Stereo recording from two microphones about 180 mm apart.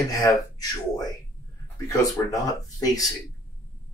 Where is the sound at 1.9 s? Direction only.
20° left (ahead or behind).